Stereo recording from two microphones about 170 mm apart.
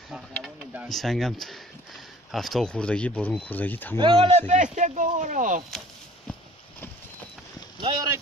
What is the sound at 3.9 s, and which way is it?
Speech, 30° right (ahead or behind).